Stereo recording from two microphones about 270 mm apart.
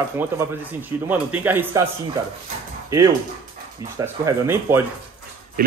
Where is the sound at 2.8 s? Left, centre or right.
Centre.